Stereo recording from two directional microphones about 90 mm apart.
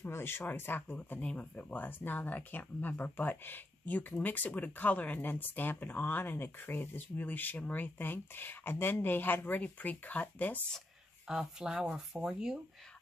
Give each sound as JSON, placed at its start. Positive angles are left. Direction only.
{"t": 0.0, "sound": "speech", "side_deg": 25}
{"t": 11.2, "sound": "speech", "side_deg": -10}